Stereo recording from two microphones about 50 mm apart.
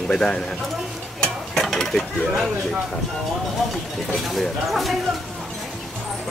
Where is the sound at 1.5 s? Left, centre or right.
Centre.